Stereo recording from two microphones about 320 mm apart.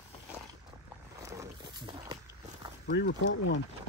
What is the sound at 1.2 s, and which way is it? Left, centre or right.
Walk, centre.